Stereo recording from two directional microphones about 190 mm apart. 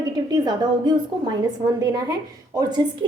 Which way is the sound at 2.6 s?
25° right (ahead or behind).